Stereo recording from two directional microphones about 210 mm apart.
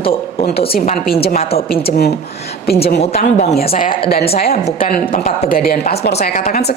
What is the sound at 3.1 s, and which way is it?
A woman's voice, 40° left (ahead or behind).